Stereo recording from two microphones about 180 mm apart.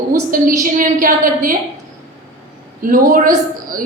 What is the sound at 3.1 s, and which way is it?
Speech, 50° right (ahead or behind).